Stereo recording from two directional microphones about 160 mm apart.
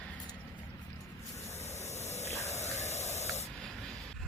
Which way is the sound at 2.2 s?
45° left (ahead or behind).